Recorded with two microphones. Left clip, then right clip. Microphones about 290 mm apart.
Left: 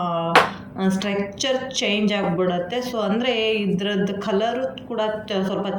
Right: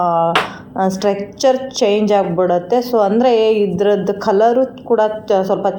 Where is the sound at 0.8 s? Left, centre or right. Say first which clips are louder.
Right 8 dB; centre.